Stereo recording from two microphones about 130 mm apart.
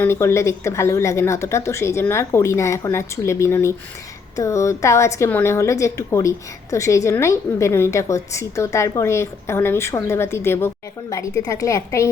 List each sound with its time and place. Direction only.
0.0 s a woman's voice: 20° left (ahead or behind)